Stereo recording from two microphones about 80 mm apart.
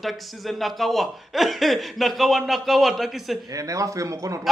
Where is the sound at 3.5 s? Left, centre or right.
Right.